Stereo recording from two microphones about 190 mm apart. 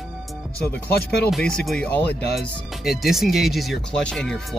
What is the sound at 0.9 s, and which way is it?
Speech, 55° left (ahead or behind).